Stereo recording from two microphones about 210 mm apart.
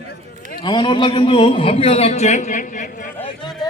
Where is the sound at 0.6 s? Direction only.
20° left (ahead or behind); by 3.1 s 40° left (ahead or behind).